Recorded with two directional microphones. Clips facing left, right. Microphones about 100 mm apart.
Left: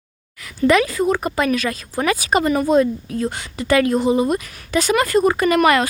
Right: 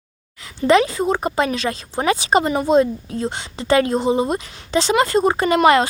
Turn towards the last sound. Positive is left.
turn(degrees=-25)  # may be behind; listen again after turning